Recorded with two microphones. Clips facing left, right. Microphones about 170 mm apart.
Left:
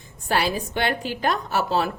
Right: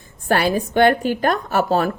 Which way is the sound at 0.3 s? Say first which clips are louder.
Right 5 dB; 55° right (ahead or behind).